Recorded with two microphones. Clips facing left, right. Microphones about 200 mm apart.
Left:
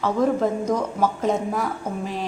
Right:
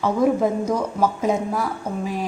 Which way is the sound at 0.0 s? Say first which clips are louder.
Right 2 dB; 10° right (ahead or behind).